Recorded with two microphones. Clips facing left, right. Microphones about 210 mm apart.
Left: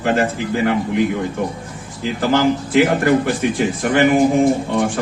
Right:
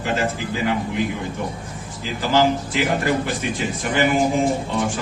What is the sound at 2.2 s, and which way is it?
A man's voice, 55° left (ahead or behind).